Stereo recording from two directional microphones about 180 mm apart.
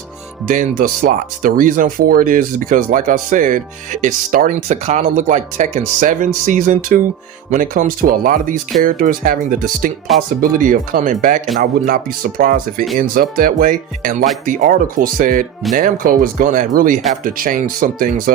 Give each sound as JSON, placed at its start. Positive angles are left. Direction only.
{"t": 0.4, "sound": "speech", "side_deg": -50}